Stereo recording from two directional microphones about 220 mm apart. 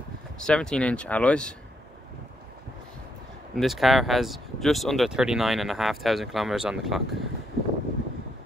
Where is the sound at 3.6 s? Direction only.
Centre (ahead or behind).